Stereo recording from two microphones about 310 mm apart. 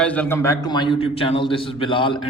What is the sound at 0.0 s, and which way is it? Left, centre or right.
A man's voice, centre.